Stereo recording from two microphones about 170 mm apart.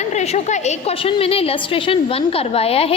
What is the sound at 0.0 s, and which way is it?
A woman's voice, 45° left (ahead or behind).